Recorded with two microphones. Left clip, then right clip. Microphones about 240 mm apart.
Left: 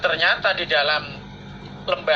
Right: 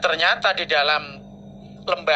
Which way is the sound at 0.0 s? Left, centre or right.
Right.